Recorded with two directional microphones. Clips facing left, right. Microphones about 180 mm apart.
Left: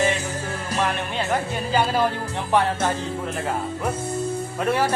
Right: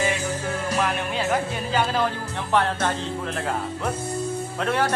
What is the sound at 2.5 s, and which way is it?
Speech, 10° left (ahead or behind).